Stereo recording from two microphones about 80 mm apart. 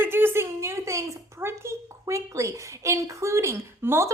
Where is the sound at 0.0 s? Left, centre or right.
Right.